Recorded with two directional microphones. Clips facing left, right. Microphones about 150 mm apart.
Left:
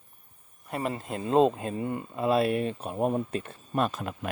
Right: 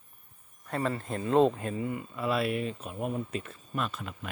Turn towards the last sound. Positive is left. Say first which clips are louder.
# left 6 dB
turn(degrees=45)  # may be behind; listen again after turning